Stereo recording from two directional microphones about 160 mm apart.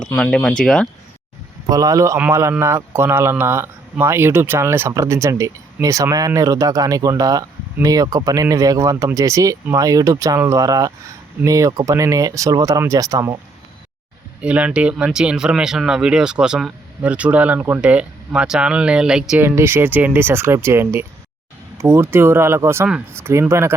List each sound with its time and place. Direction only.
0.2 s speech: 5° left (ahead or behind)
1.7 s speech: 20° right (ahead or behind)
14.4 s speech: 10° right (ahead or behind)